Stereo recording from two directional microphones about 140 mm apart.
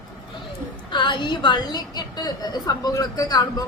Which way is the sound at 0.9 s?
35° left (ahead or behind).